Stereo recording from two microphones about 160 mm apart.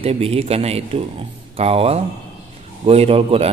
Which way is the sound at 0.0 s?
35° right (ahead or behind).